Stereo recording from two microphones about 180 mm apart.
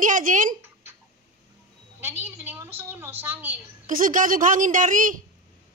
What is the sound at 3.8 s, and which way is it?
A woman's voice, 50° right (ahead or behind).